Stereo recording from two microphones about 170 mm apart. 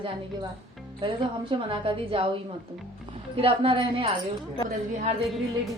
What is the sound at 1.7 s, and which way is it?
Speech, 30° right (ahead or behind).